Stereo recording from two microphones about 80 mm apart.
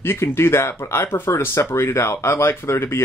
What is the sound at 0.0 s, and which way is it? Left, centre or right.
Speech, left.